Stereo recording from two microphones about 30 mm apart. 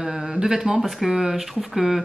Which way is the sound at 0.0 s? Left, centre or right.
Centre.